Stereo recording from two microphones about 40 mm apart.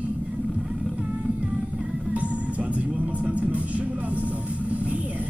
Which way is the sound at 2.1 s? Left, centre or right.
Right.